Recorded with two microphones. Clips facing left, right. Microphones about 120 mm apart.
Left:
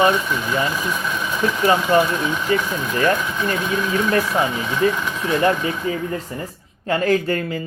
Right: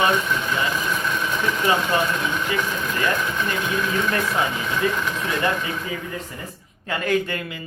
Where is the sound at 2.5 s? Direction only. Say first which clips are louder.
Left 7 dB; 40° left (ahead or behind).